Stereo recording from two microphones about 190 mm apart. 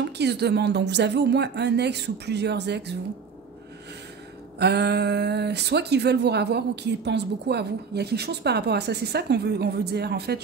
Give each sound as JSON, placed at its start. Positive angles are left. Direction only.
{"t": 0.0, "sound": "speech", "side_deg": -60}
{"t": 4.6, "sound": "speech", "side_deg": -60}